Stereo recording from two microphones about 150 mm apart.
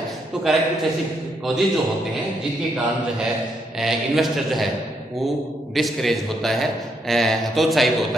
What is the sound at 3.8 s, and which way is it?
Speech, centre (ahead or behind).